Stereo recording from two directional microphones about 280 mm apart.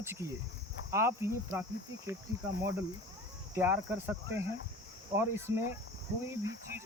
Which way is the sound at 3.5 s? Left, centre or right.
Centre.